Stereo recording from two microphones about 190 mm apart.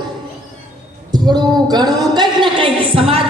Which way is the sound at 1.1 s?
20° right (ahead or behind).